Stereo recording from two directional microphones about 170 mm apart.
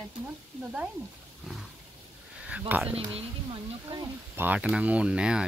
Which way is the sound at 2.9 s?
30° right (ahead or behind).